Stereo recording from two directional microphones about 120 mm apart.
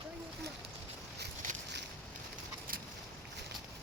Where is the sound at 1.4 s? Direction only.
90° right.